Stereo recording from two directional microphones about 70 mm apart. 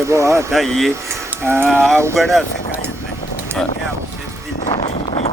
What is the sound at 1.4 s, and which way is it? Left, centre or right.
Speech, right.